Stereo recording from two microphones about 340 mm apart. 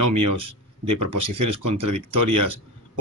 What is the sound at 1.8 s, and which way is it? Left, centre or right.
Speech, right.